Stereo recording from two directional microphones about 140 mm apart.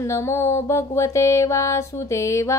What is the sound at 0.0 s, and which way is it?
Mantra, 20° left (ahead or behind).